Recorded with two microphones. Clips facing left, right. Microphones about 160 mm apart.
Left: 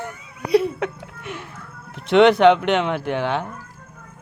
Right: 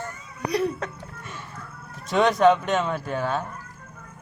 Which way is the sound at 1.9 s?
65° left (ahead or behind).